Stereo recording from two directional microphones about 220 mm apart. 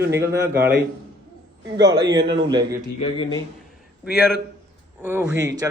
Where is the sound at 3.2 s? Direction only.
20° left (ahead or behind).